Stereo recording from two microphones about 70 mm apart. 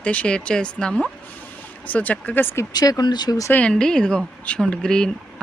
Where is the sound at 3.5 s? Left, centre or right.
Centre.